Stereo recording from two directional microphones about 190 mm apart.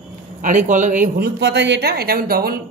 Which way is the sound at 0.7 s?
40° right (ahead or behind).